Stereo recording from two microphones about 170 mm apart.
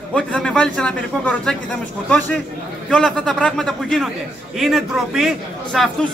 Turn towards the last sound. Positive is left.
turn(degrees=0)  # may be behind; listen again after turning